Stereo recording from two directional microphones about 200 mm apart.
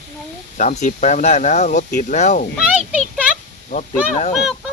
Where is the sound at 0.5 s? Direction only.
35° left (ahead or behind).